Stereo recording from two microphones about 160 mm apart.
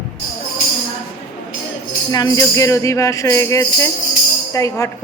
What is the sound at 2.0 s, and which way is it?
Music, 25° left (ahead or behind).